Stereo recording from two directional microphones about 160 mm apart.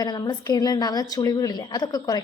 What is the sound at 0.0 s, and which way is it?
A woman's voice, 25° left (ahead or behind).